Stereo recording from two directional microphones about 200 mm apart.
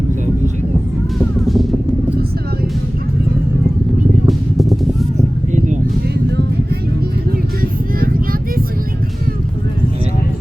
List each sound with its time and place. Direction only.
1.4 s music: centre (ahead or behind)
4.3 s music: centre (ahead or behind)
5.5 s vehicle: 40° right (ahead or behind)
7.9 s vehicle: 45° right (ahead or behind)